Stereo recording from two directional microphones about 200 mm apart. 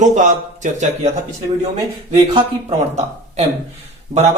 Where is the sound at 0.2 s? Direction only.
40° right (ahead or behind).